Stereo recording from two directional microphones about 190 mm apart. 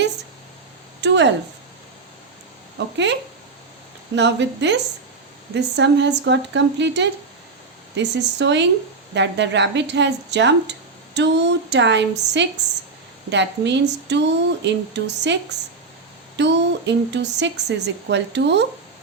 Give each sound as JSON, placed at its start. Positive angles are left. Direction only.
{"t": 1.0, "sound": "speech", "side_deg": -65}
{"t": 2.7, "sound": "speech", "side_deg": -65}